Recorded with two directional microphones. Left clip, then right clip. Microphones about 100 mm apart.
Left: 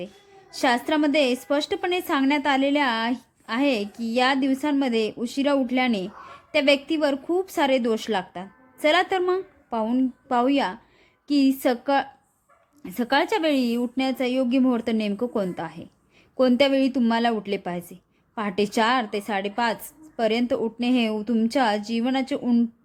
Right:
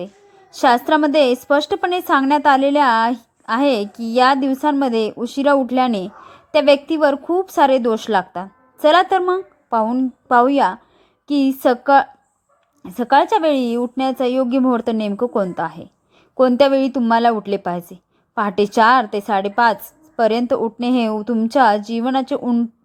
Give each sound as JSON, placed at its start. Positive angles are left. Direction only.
{"t": 0.5, "sound": "a woman's voice", "side_deg": -30}
{"t": 12.8, "sound": "a woman's voice", "side_deg": -15}